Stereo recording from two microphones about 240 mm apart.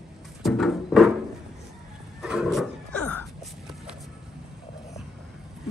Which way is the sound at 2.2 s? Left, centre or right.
Centre.